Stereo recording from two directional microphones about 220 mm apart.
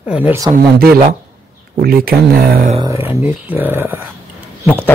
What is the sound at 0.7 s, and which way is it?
Speech, 45° right (ahead or behind).